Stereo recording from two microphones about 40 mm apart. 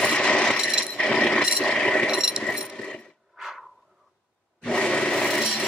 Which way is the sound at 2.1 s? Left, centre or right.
Centre.